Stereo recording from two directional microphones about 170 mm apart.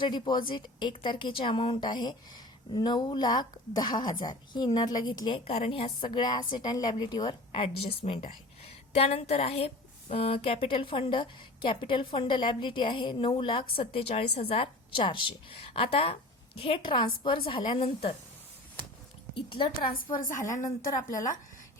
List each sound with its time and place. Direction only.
0.0 s a woman's voice: 25° left (ahead or behind)
19.3 s a woman's voice: 30° left (ahead or behind)